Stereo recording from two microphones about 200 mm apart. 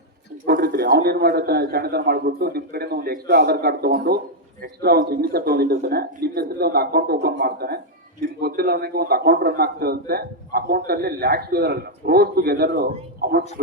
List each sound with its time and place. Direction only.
0.4 s a man's voice: 45° right (ahead or behind)